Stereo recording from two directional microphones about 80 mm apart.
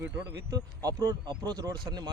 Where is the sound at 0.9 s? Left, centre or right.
Right.